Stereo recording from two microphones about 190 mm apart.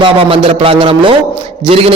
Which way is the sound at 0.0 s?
30° right (ahead or behind).